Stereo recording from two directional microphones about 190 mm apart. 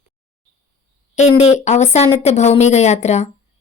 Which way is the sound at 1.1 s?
35° left (ahead or behind).